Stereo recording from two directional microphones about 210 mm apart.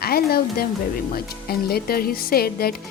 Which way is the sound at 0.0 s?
45° left (ahead or behind).